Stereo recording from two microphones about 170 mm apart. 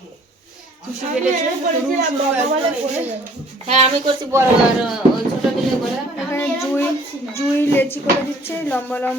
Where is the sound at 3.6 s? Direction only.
35° right (ahead or behind).